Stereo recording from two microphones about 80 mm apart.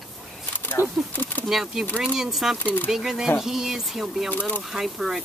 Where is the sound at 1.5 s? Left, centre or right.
Centre.